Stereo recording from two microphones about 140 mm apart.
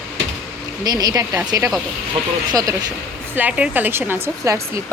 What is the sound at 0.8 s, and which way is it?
Speech, 30° right (ahead or behind).